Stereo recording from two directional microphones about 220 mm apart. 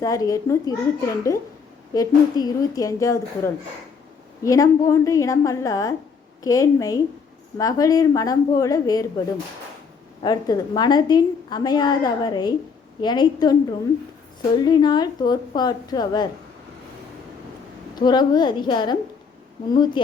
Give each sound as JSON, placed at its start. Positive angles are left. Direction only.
{"t": 0.0, "sound": "a woman's voice", "side_deg": 15}
{"t": 1.9, "sound": "a woman's voice", "side_deg": 15}
{"t": 10.2, "sound": "a woman's voice", "side_deg": 20}
{"t": 17.9, "sound": "a woman's voice", "side_deg": 20}